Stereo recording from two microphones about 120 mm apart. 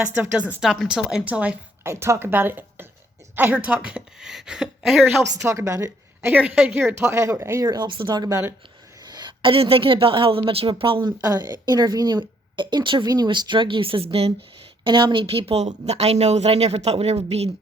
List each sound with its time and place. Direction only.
0.0 s a woman's voice: 10° right (ahead or behind)
1.8 s speech: 20° right (ahead or behind); by 5.0 s centre (ahead or behind)
5.5 s a woman's voice: 25° right (ahead or behind); by 11.1 s 45° right (ahead or behind)
11.2 s speech: 30° right (ahead or behind); by 14.3 s 55° right (ahead or behind)
14.8 s speech: 40° right (ahead or behind); by 17.5 s 60° right (ahead or behind)